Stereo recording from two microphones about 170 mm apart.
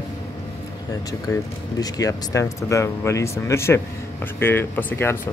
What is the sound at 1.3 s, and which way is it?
Speech, 20° left (ahead or behind).